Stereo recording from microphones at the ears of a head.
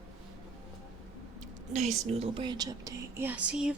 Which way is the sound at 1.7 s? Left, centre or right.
Right.